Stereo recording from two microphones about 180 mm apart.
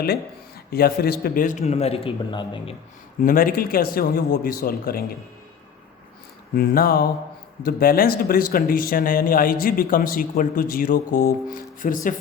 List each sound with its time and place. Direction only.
0.0 s speech: 60° left (ahead or behind); by 2.7 s 25° left (ahead or behind)
3.2 s speech: 50° left (ahead or behind)
6.5 s speech: 55° left (ahead or behind)